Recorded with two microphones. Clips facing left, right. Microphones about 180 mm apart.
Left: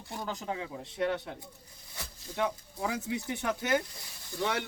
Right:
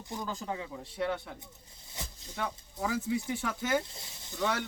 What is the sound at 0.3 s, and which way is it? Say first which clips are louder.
Speech: left 4 dB; 20° left (ahead or behind).